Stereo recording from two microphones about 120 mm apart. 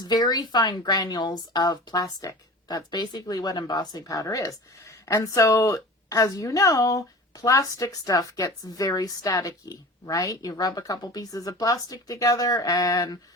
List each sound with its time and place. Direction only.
0.0 s speech: 35° left (ahead or behind)